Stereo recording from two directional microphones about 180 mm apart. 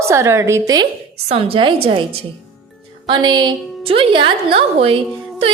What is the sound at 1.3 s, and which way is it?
A woman's voice, 30° right (ahead or behind).